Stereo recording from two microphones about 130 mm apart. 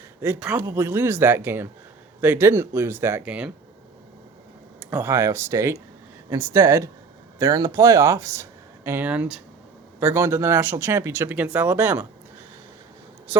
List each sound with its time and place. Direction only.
0.2 s speech: 15° right (ahead or behind)
4.8 s speech: 15° right (ahead or behind)